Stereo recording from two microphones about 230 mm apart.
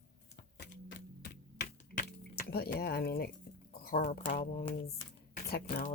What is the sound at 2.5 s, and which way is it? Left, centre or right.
Speech, left.